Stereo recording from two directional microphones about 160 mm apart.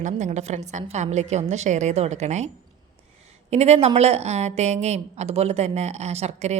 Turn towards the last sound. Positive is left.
turn(degrees=-45)  # may be behind; listen again after turning